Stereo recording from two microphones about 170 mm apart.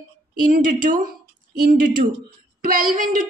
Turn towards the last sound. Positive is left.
turn(degrees=-55)  # may be behind; listen again after turning